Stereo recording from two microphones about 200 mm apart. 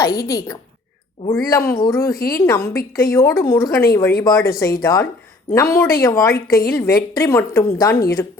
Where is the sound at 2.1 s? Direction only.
50° left (ahead or behind).